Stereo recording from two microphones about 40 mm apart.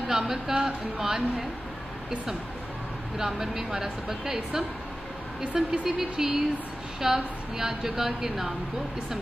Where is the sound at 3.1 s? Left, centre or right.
Centre.